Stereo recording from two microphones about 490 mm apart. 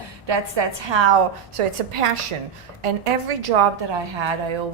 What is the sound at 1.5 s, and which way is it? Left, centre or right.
A woman's voice, right.